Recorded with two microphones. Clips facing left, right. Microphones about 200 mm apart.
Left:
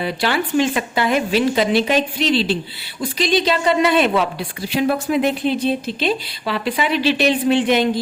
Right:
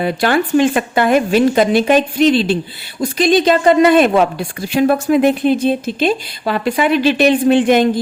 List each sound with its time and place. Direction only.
0.0 s speech: 50° right (ahead or behind)